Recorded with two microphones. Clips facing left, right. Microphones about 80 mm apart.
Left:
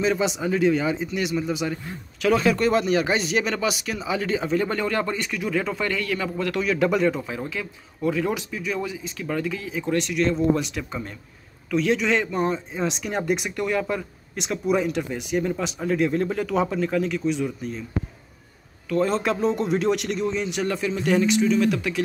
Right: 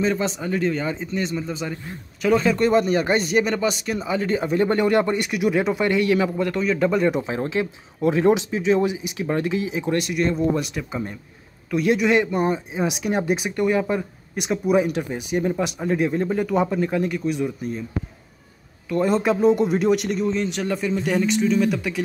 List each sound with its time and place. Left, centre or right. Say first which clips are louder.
0.0 s speech: even; centre
4.6 s speech: right 9 dB; right
6.5 s speech: left 3 dB; centre
8.0 s speech: right 6 dB; right; by 17.8 s centre
18.9 s speech: right 2 dB; centre